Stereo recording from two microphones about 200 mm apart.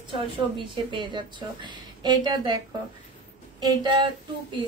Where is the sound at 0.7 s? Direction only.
25° right (ahead or behind).